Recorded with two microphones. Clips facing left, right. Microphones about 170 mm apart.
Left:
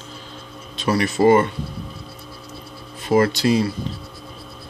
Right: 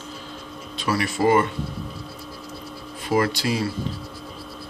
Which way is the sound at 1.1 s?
30° left (ahead or behind).